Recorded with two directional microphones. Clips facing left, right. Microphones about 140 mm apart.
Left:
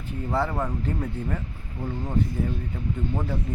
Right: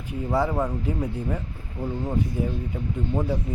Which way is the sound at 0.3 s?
10° right (ahead or behind).